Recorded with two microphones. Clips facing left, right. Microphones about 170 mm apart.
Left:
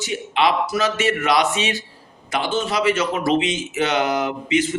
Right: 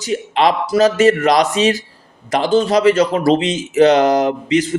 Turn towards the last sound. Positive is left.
turn(degrees=-35)  # may be behind; listen again after turning